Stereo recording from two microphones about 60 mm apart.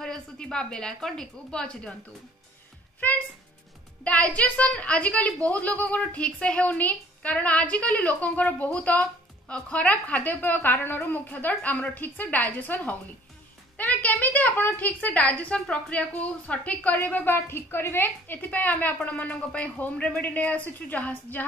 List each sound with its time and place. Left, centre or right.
0.0 s a woman's voice: centre
4.0 s a woman's voice: left